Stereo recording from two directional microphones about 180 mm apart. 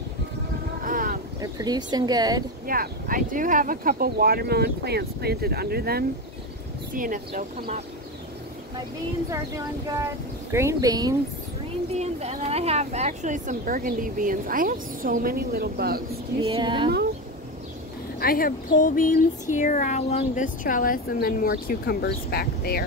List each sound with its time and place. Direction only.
0.8 s boat: 50° right (ahead or behind)
1.4 s speech: 20° right (ahead or behind)
2.6 s speech: 55° right (ahead or behind)
6.9 s speech: 50° right (ahead or behind)
10.5 s speech: 15° right (ahead or behind)
11.9 s speech: 35° right (ahead or behind); by 16.0 s 60° right (ahead or behind)
16.3 s speech: 30° right (ahead or behind)
18.2 s a woman's voice: 55° left (ahead or behind)